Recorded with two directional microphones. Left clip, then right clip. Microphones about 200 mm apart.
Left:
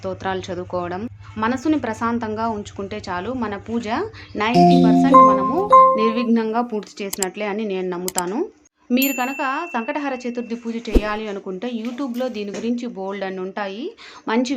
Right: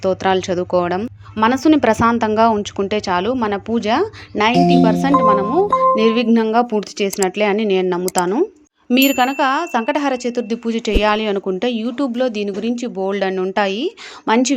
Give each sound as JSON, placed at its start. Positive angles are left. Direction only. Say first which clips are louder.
{"t": 0.0, "sound": "speech", "louder": "right 9 dB", "side_deg": -35}